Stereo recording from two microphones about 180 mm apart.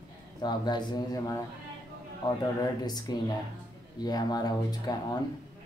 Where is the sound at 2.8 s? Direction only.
20° left (ahead or behind).